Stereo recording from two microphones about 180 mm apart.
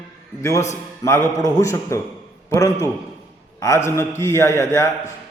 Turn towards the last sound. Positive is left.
turn(degrees=15)  # may be behind; listen again after turning